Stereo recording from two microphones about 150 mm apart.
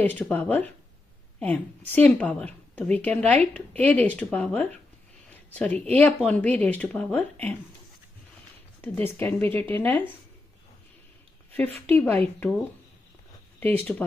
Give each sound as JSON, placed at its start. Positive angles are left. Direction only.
{"t": 0.0, "sound": "a woman's voice", "side_deg": 10}
{"t": 8.8, "sound": "a woman's voice", "side_deg": 10}
{"t": 11.8, "sound": "a woman's voice", "side_deg": 10}